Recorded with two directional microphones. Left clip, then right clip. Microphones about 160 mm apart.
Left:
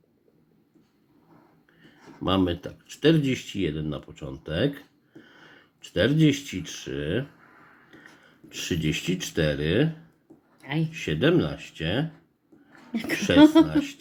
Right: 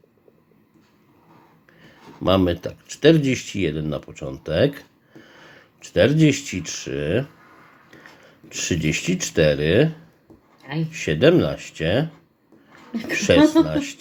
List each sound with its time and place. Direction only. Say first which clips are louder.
2.2 s speech: right 6 dB; 15° right (ahead or behind)
10.6 s a sound: right 1 dB; 35° left (ahead or behind)
10.9 s speech: right 7 dB; 20° right (ahead or behind)
12.9 s speech: right 1 dB; 35° left (ahead or behind)
13.1 s speech: right 2 dB; 20° right (ahead or behind)